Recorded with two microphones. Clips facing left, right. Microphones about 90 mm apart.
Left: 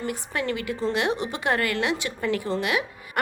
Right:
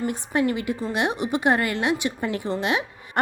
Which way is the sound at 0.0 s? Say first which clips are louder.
Right 5 dB; 20° right (ahead or behind).